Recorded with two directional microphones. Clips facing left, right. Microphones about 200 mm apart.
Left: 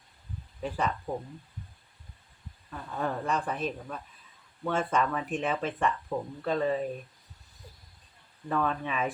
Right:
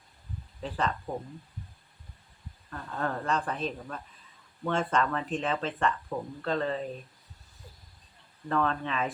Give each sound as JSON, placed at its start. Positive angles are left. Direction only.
{"t": 1.1, "sound": "speech", "side_deg": 0}
{"t": 2.6, "sound": "speech", "side_deg": 10}
{"t": 8.4, "sound": "speech", "side_deg": 10}